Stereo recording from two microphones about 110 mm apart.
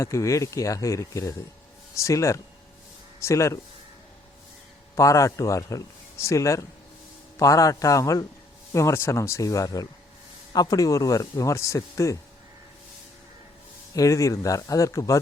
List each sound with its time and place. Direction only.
0.0 s speech: 30° left (ahead or behind)
4.9 s speech: 30° left (ahead or behind)
13.9 s speech: 30° left (ahead or behind)